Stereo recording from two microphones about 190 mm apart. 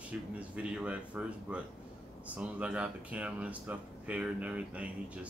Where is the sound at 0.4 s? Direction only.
5° right (ahead or behind).